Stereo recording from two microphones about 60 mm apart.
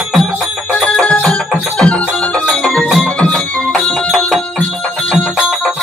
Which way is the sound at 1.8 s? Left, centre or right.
Left.